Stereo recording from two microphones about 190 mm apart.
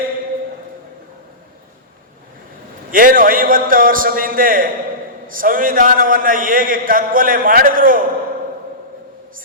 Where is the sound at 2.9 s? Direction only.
45° right (ahead or behind).